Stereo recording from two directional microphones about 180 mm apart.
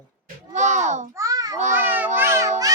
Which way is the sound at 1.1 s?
20° right (ahead or behind).